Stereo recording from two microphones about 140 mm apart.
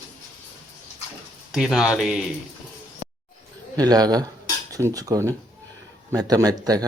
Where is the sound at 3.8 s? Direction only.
25° right (ahead or behind).